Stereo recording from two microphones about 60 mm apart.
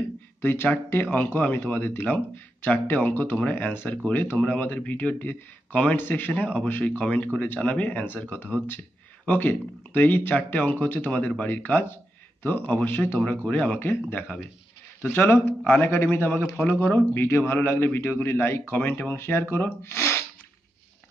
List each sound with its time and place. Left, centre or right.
0.4 s speech: left
7.6 s speech: left
11.4 s speech: left